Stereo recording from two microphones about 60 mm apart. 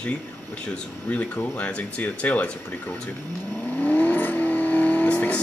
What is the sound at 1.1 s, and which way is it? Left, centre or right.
Speech, left.